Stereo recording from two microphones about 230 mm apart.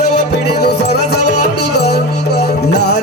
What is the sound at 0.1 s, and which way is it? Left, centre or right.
Music, left.